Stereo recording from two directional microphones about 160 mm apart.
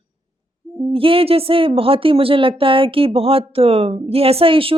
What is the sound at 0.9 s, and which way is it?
A woman's voice, 35° right (ahead or behind).